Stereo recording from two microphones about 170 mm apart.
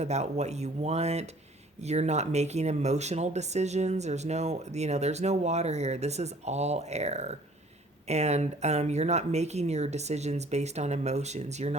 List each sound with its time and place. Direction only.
0.0 s speech: 40° right (ahead or behind)